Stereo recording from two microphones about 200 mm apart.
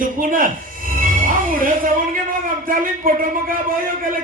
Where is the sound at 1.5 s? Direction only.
45° right (ahead or behind).